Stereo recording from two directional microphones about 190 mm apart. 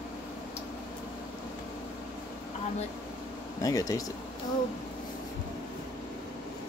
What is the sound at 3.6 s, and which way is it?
Speech, 20° left (ahead or behind).